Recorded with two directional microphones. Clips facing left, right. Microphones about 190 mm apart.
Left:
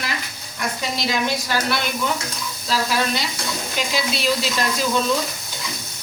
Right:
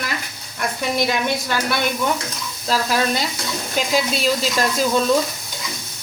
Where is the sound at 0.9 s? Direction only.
55° right (ahead or behind).